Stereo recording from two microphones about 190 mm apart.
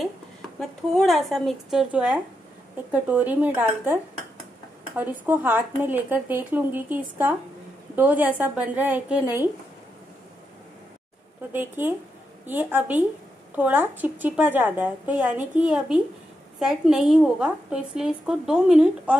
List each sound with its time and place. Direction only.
0.6 s a woman's voice: centre (ahead or behind)
9.2 s speech: 20° left (ahead or behind)
11.5 s a woman's voice: 10° right (ahead or behind)